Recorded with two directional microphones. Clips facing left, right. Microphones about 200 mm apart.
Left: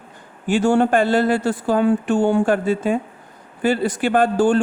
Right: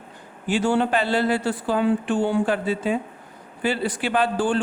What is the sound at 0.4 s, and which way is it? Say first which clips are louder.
Speech: left 5 dB; 50° left (ahead or behind).